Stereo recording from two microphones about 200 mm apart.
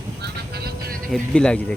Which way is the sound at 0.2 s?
50° right (ahead or behind).